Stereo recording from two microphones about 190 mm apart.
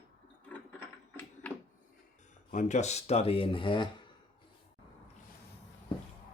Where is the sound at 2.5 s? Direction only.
35° left (ahead or behind).